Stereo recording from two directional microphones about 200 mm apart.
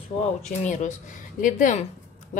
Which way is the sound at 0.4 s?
35° left (ahead or behind).